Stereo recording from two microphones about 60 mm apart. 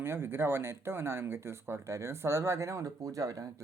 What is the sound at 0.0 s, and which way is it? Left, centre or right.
Speech, right.